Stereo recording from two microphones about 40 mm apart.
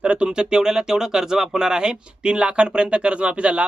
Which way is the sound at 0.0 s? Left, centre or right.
Right.